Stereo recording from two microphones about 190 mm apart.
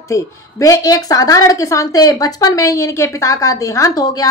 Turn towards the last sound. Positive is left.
turn(degrees=20)  # may be behind; listen again after turning